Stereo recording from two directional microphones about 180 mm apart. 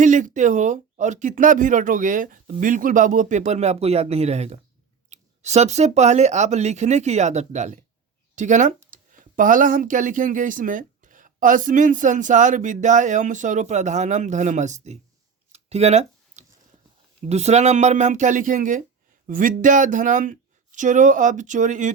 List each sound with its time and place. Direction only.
0.0 s speech: 45° right (ahead or behind)
15.5 s a sound: 35° right (ahead or behind)
17.2 s speech: 35° right (ahead or behind)